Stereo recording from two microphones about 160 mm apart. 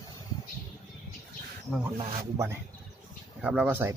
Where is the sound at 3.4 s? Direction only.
10° right (ahead or behind).